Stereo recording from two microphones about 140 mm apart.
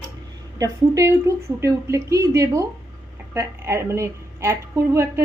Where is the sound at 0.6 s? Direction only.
20° right (ahead or behind).